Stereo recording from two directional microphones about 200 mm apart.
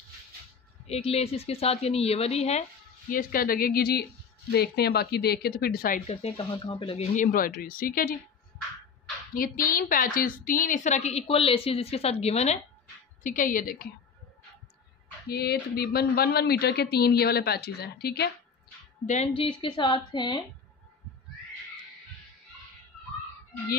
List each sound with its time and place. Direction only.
0.8 s a woman's voice: 30° left (ahead or behind)
3.1 s speech: 45° left (ahead or behind)
6.0 s speech: 30° left (ahead or behind)
7.2 s speech: 45° left (ahead or behind)
9.3 s a woman's voice: 45° left (ahead or behind)
15.2 s speech: 50° left (ahead or behind)
19.0 s a woman's voice: 35° left (ahead or behind)
19.4 s speech: 25° left (ahead or behind)